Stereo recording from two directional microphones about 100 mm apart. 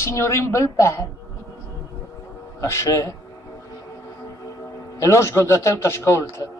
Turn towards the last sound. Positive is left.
turn(degrees=25)  # may be behind; listen again after turning